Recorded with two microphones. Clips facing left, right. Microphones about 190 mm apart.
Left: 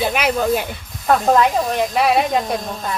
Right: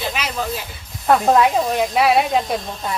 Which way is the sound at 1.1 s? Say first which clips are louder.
Even; 5° right (ahead or behind).